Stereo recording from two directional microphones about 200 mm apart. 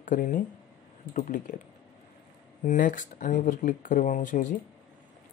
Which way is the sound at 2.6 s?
40° left (ahead or behind).